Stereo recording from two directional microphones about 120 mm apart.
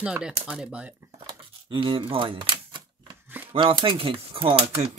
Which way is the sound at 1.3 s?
45° right (ahead or behind).